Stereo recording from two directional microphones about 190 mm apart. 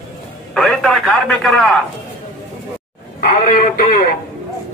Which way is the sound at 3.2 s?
40° left (ahead or behind).